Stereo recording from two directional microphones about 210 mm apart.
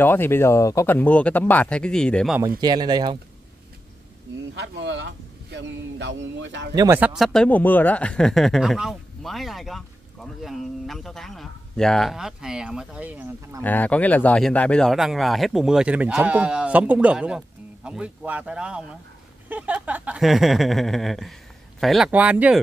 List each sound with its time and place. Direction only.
0.0 s speech: 10° left (ahead or behind)
2.4 s speech: 20° right (ahead or behind)
4.6 s a man's voice: 60° right (ahead or behind)
6.7 s speech: 20° right (ahead or behind)
7.0 s speech: centre (ahead or behind)
13.6 s speech: 5° left (ahead or behind)